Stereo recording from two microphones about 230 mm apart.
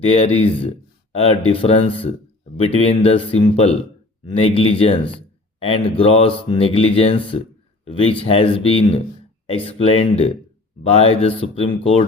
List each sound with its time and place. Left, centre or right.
0.1 s speech: left